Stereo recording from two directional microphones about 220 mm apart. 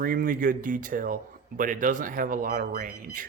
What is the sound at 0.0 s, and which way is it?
Speech, 40° right (ahead or behind).